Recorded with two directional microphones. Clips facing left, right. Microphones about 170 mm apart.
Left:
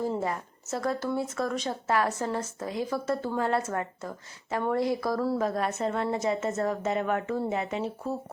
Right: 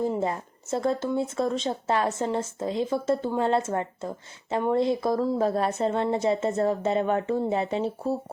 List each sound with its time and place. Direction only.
0.0 s speech: 20° right (ahead or behind)
5.4 s a woman's voice: 30° right (ahead or behind)